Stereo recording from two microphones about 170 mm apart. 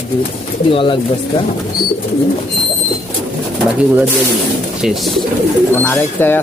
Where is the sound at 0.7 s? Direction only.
30° left (ahead or behind).